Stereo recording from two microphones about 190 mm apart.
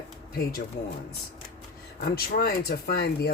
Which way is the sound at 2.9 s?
55° left (ahead or behind).